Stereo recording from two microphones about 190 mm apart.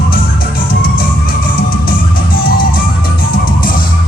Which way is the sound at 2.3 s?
50° left (ahead or behind).